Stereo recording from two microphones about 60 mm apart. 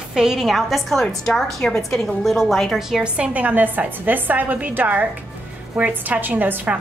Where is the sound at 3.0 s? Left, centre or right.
Right.